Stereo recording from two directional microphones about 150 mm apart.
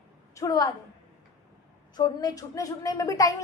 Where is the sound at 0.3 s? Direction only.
25° left (ahead or behind).